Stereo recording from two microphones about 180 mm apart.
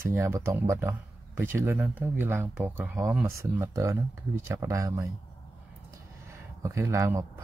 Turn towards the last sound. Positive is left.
turn(degrees=-15)  # may be behind; listen again after turning